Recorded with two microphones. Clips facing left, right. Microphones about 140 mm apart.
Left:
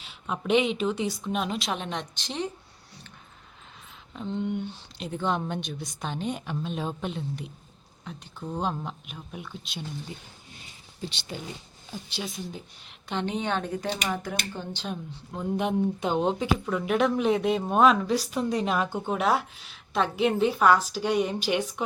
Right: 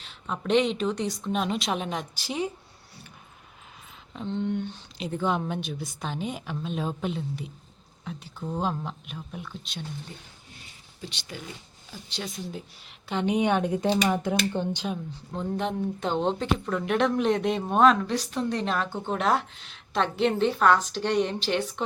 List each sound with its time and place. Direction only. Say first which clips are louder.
0.0 s speech: even; 5° left (ahead or behind)
4.1 s speech: right 1 dB; centre (ahead or behind)
11.0 s speech: left 4 dB; 30° left (ahead or behind)
12.0 s speech: right 1 dB; 5° left (ahead or behind)
13.2 s speech: right 7 dB; 15° right (ahead or behind)
14.8 s speech: right 3 dB; centre (ahead or behind)